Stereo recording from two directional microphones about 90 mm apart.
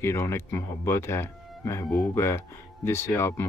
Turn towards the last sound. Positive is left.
turn(degrees=30)  # may be behind; listen again after turning